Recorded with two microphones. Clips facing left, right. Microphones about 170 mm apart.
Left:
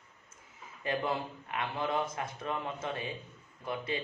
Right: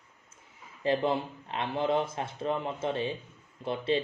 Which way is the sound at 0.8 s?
25° right (ahead or behind).